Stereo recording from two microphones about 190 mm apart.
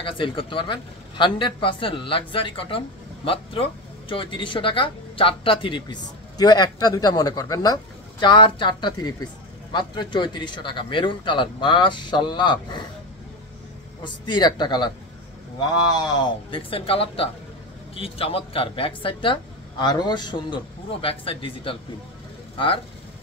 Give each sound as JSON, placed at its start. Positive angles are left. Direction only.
{"t": 0.0, "sound": "speech", "side_deg": 25}
{"t": 4.1, "sound": "speech", "side_deg": 25}
{"t": 14.0, "sound": "speech", "side_deg": 25}
{"t": 15.9, "sound": "speech", "side_deg": 20}